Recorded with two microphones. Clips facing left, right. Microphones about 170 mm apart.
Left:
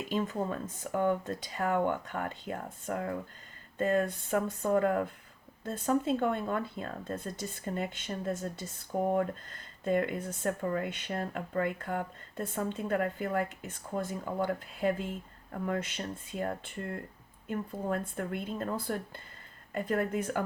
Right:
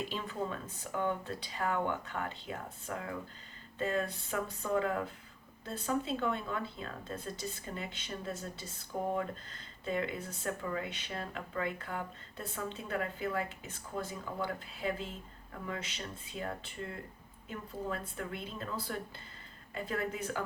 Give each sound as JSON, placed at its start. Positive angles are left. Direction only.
{"t": 0.1, "sound": "speech", "side_deg": 45}